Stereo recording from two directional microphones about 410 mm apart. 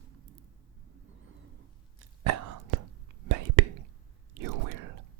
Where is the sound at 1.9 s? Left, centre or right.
Right.